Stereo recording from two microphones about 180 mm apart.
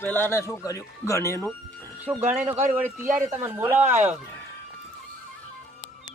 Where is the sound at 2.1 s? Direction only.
10° right (ahead or behind).